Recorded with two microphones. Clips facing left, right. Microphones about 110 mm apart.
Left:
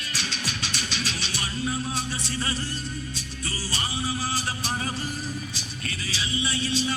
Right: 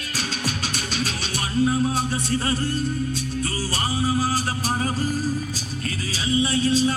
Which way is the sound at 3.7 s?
45° right (ahead or behind).